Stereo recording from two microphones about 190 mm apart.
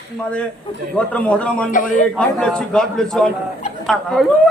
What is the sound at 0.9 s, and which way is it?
Speech, 5° left (ahead or behind).